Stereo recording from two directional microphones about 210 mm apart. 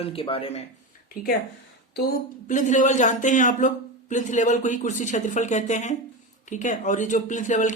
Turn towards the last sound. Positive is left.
turn(degrees=35)  # may be behind; listen again after turning